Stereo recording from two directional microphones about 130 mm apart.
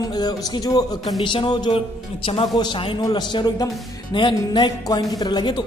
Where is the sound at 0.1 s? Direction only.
30° left (ahead or behind).